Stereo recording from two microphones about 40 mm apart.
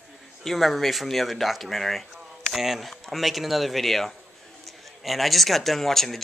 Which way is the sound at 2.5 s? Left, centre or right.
Centre.